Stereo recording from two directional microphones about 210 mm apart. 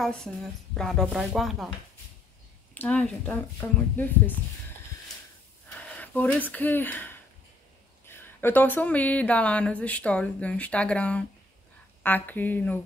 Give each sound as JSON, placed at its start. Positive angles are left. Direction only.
{"t": 0.0, "sound": "speech", "side_deg": 0}
{"t": 2.7, "sound": "a woman's voice", "side_deg": 5}
{"t": 5.9, "sound": "a woman's voice", "side_deg": 5}